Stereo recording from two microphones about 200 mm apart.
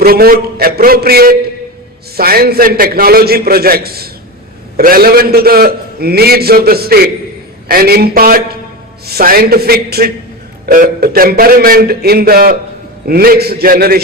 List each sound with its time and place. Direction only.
0.0 s a man's voice: 50° right (ahead or behind)